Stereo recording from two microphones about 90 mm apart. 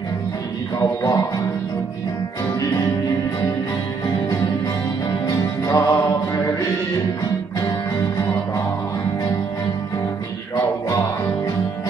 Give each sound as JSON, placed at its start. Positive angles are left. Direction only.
{"t": 0.7, "sound": "music", "side_deg": 45}
{"t": 5.2, "sound": "music", "side_deg": 40}
{"t": 8.2, "sound": "music", "side_deg": 30}